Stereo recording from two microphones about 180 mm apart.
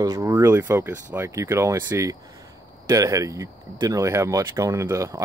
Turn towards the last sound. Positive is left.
turn(degrees=-15)  # may be behind; listen again after turning